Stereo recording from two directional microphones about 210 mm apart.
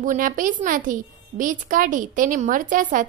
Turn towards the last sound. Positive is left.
turn(degrees=-40)  # may be behind; listen again after turning